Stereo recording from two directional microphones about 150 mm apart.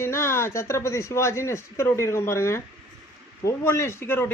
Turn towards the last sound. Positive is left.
turn(degrees=15)  # may be behind; listen again after turning